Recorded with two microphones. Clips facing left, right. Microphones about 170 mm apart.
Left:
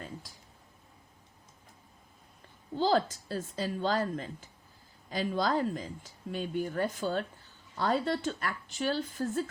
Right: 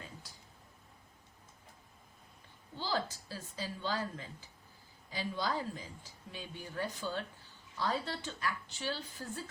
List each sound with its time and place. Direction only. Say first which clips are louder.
2.9 s a woman's voice: left 8 dB; 60° left (ahead or behind)